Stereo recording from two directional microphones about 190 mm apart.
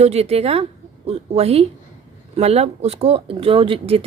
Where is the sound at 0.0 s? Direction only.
35° right (ahead or behind).